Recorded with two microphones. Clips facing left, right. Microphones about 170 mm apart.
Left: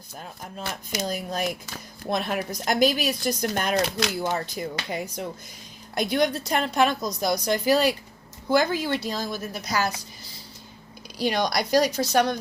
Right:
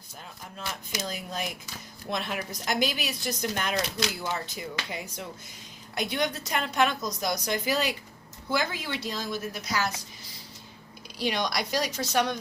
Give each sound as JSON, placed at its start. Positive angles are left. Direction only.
{"t": 1.0, "sound": "speech", "side_deg": 40}
{"t": 3.9, "sound": "speech", "side_deg": 60}
{"t": 4.5, "sound": "speech", "side_deg": 45}
{"t": 11.2, "sound": "speech", "side_deg": 40}